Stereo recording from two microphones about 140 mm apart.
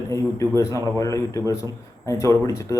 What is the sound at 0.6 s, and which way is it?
A man's voice, 20° left (ahead or behind).